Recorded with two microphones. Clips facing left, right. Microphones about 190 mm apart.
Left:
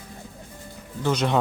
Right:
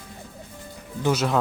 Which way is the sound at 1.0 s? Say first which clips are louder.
Right 1 dB; 5° right (ahead or behind).